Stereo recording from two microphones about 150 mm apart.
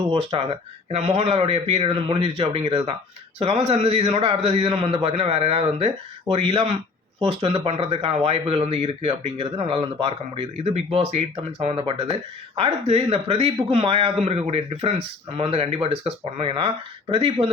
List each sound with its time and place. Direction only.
0.1 s speech: 35° right (ahead or behind)